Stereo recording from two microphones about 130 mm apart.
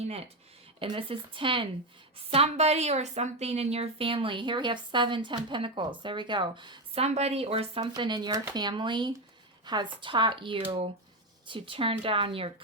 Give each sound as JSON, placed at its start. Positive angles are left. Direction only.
{"t": 0.8, "sound": "a woman's voice", "side_deg": -45}
{"t": 2.3, "sound": "a woman's voice", "side_deg": -55}
{"t": 7.0, "sound": "a woman's voice", "side_deg": -55}